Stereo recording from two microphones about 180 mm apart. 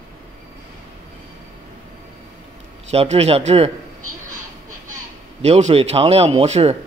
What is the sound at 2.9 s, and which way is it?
Speech, 35° right (ahead or behind).